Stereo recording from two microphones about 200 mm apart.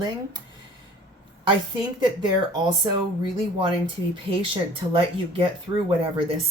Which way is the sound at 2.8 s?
20° right (ahead or behind).